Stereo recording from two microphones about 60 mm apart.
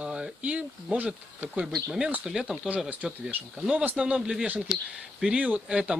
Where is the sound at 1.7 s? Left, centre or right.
Centre.